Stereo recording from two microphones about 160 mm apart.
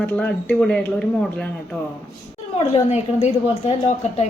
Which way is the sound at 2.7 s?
40° left (ahead or behind).